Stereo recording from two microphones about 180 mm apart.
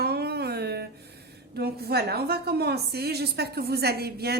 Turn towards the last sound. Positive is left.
turn(degrees=-60)  # may be behind; listen again after turning